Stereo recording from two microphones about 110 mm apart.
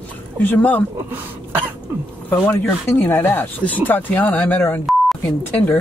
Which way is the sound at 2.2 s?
20° left (ahead or behind).